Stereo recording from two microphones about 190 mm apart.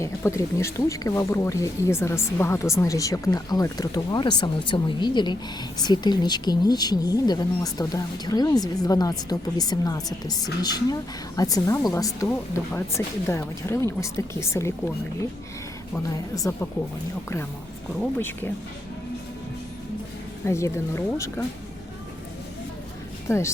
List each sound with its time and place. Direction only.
0.0 s speech: 15° left (ahead or behind)
16.3 s speech: 15° left (ahead or behind)
18.2 s speech: 10° left (ahead or behind)
20.4 s speech: 15° left (ahead or behind)
23.3 s speech: 15° left (ahead or behind)